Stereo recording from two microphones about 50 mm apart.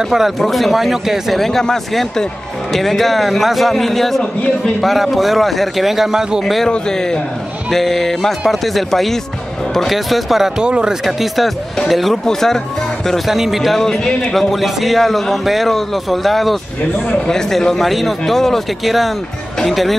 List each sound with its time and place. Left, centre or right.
0.4 s a man's voice: centre
1.4 s a man's voice: centre
6.4 s a man's voice: centre
10.6 s speech: centre
11.1 s a man's voice: centre
13.3 s a man's voice: centre